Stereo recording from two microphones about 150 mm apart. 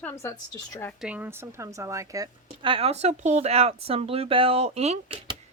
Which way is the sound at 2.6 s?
35° right (ahead or behind).